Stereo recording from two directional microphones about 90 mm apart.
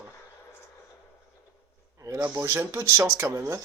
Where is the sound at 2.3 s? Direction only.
30° right (ahead or behind).